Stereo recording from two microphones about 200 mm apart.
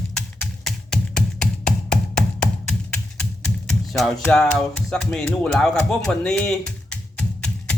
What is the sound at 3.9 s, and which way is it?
Speech, centre (ahead or behind).